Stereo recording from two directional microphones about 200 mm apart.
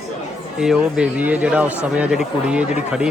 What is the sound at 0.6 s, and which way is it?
Speech, 5° right (ahead or behind).